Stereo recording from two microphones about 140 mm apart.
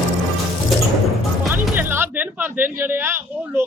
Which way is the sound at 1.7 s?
15° right (ahead or behind).